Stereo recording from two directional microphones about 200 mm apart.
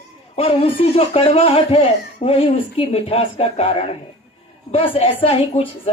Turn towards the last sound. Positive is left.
turn(degrees=30)  # may be behind; listen again after turning